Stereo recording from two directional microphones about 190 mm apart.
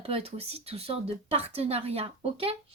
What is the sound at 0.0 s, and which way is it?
Speech, 30° right (ahead or behind).